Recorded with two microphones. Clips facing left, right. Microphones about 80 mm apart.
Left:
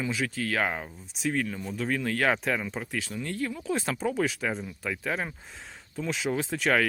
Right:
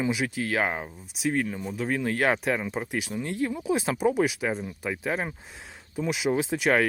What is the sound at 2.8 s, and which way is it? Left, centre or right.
Speech, centre.